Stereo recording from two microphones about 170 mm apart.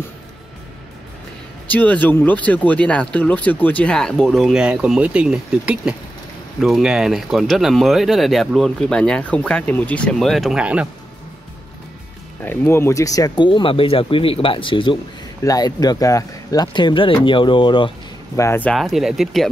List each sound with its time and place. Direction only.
1.7 s speech: 10° left (ahead or behind); by 10.9 s 5° right (ahead or behind)
12.4 s speech: 15° left (ahead or behind); by 17.9 s 30° left (ahead or behind)
18.3 s speech: 15° left (ahead or behind); by 19.5 s centre (ahead or behind)